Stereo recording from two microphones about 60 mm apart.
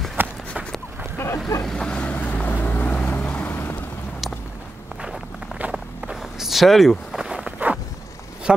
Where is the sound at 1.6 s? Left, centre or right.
Centre; by 2.9 s left.